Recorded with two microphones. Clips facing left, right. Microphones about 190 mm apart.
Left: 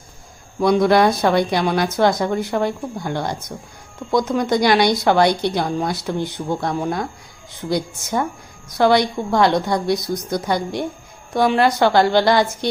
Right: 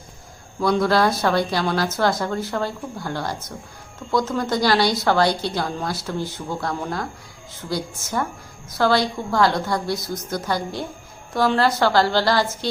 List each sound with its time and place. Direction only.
0.6 s a woman's voice: 15° left (ahead or behind)